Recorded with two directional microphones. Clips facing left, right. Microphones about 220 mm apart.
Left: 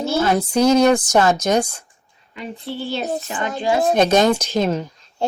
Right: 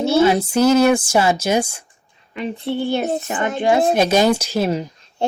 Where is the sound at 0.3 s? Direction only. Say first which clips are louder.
Right 1 dB; 10° right (ahead or behind).